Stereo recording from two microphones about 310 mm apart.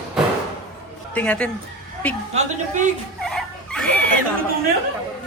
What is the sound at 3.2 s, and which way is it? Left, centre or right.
Dog, centre.